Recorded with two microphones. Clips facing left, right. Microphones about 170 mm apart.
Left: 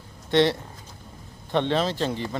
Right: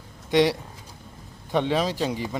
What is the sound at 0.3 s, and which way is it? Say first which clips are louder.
Speech: even; 10° right (ahead or behind).